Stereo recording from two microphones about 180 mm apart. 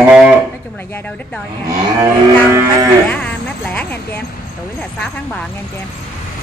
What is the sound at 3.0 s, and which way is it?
Speech, 10° left (ahead or behind).